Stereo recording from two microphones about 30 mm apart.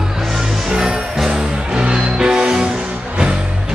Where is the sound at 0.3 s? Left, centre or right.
Centre.